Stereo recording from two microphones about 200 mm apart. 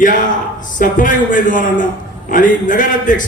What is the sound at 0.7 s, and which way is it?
A man's voice, 40° left (ahead or behind).